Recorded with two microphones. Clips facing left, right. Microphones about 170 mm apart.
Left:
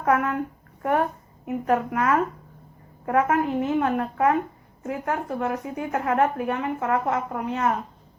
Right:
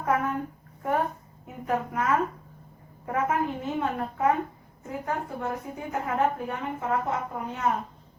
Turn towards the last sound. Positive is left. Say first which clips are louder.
# left 4 dB
turn(degrees=75)  # may be behind; listen again after turning